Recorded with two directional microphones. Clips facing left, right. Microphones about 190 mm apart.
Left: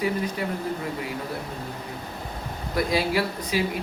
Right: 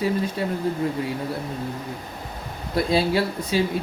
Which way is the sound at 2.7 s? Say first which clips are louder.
Right 3 dB; 30° right (ahead or behind).